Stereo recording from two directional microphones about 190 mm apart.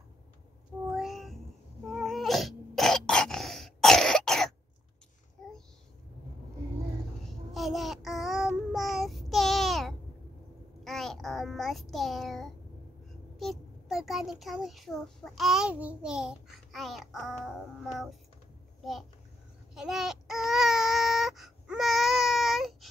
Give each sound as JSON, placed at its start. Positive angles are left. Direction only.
{"t": 0.9, "sound": "child singing", "side_deg": 0}
{"t": 1.9, "sound": "cough", "side_deg": 0}
{"t": 5.4, "sound": "a sound", "side_deg": 0}
{"t": 7.5, "sound": "child singing", "side_deg": 0}
{"t": 10.8, "sound": "a sound", "side_deg": 0}
{"t": 19.7, "sound": "baby cry", "side_deg": 0}